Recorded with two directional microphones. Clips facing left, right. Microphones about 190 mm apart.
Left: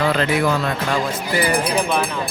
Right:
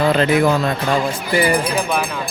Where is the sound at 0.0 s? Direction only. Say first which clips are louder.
Right 4 dB; 20° right (ahead or behind).